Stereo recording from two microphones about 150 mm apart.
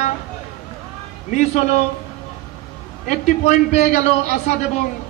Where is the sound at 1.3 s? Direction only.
55° left (ahead or behind).